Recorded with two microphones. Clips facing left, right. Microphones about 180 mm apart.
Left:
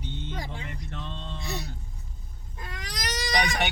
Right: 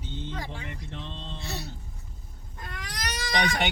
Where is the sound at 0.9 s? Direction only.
25° right (ahead or behind).